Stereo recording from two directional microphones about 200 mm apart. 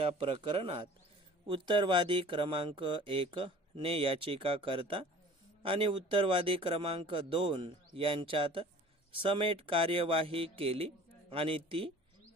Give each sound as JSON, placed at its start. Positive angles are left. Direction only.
{"t": 0.0, "sound": "speech", "side_deg": -25}